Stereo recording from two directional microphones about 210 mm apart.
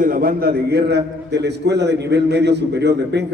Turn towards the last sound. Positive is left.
turn(degrees=-55)  # may be behind; listen again after turning